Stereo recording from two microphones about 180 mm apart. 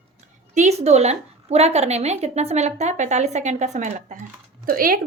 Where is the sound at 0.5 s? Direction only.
40° right (ahead or behind).